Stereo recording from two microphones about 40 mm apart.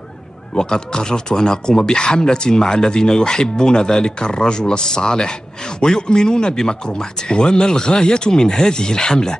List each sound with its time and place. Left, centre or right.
0.6 s speech: centre